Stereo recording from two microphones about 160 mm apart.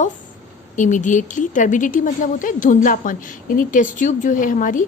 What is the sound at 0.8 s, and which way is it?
A woman's voice, 50° left (ahead or behind).